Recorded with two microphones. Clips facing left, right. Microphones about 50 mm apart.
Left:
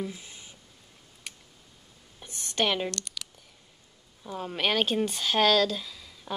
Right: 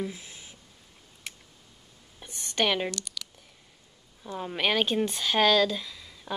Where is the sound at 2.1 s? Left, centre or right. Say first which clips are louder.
Even; centre.